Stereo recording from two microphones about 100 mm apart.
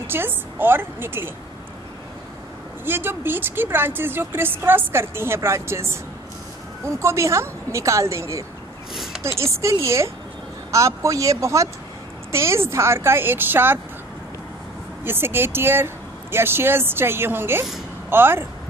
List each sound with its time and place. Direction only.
0.0 s speech: 20° right (ahead or behind)
2.8 s speech: 20° right (ahead or behind)
8.9 s a sound: centre (ahead or behind)
9.4 s speech: 30° right (ahead or behind)
15.0 s speech: 20° right (ahead or behind)